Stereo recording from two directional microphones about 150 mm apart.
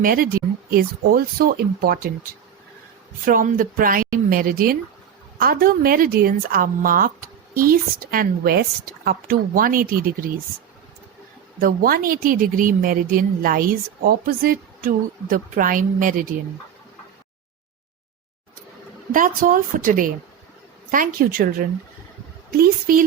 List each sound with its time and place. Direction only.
0.0 s speech: 75° right (ahead or behind)
3.2 s a woman's voice: 70° right (ahead or behind)
11.6 s a woman's voice: 80° right
19.1 s a woman's voice: 65° right (ahead or behind)
22.6 s a woman's voice: 70° right (ahead or behind)